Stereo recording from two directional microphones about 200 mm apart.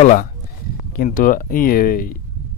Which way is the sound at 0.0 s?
40° left (ahead or behind).